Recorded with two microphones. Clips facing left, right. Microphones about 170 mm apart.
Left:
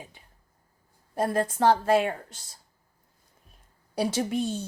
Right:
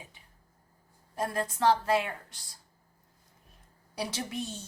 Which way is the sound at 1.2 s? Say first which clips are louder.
Left 5 dB; 55° left (ahead or behind).